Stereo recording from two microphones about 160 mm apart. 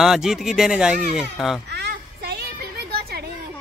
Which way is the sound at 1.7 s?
85° right.